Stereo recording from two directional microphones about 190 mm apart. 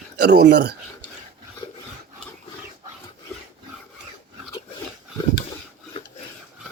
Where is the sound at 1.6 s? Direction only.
20° left (ahead or behind).